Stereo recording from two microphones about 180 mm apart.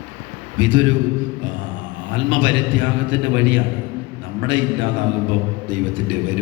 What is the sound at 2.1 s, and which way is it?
A man's voice, 90° right.